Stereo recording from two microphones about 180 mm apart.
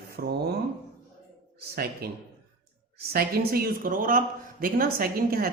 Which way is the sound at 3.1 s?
55° right (ahead or behind).